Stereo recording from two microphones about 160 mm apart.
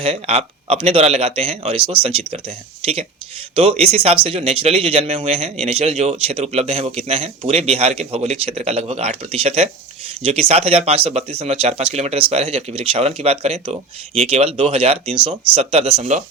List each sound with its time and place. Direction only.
0.0 s speech: 40° right (ahead or behind)